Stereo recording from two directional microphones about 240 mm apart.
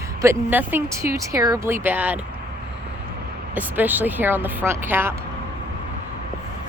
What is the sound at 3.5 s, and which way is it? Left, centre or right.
Speech, centre.